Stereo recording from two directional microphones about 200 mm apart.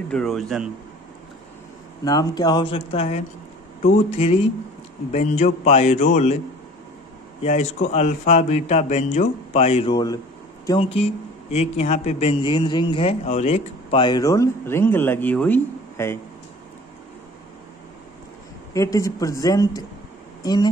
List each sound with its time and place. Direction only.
0.1 s a man's voice: centre (ahead or behind)
2.0 s speech: 20° left (ahead or behind); by 6.3 s 35° left (ahead or behind)
7.4 s speech: 35° left (ahead or behind); by 16.2 s 10° left (ahead or behind)
18.7 s speech: 15° left (ahead or behind)